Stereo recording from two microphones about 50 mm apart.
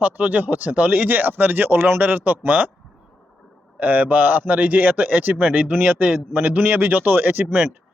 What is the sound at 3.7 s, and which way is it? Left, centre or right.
A man's voice, right.